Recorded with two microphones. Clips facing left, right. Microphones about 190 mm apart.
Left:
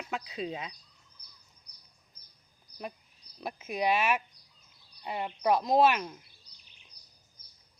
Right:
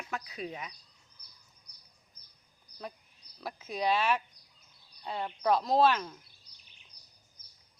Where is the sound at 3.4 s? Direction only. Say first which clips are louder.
Left 2 dB; 20° left (ahead or behind).